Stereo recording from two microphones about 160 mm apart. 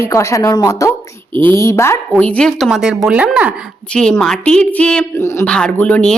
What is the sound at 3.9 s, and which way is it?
A woman's voice, 5° left (ahead or behind).